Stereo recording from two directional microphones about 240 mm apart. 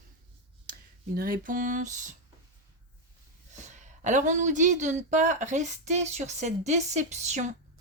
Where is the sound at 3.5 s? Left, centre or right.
Right.